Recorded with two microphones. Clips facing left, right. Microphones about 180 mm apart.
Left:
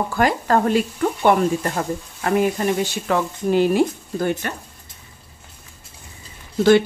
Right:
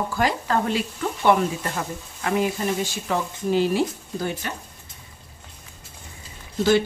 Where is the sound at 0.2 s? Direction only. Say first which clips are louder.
Left 5 dB; 45° left (ahead or behind).